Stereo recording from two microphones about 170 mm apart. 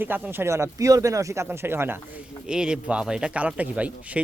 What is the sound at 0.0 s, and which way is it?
Speech, 10° right (ahead or behind).